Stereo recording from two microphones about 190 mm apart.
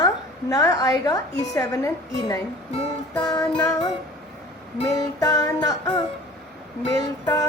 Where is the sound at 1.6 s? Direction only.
20° left (ahead or behind).